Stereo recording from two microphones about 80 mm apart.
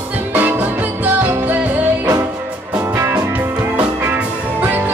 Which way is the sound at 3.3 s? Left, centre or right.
Right.